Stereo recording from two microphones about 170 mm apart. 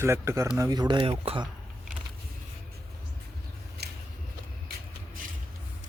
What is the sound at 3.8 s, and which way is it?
Biting, 70° right (ahead or behind).